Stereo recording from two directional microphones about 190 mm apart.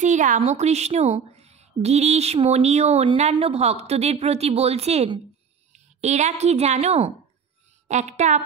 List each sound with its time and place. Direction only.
0.0 s speech: 40° right (ahead or behind)